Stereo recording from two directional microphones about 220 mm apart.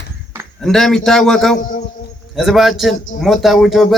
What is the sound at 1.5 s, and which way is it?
Speech, 35° left (ahead or behind).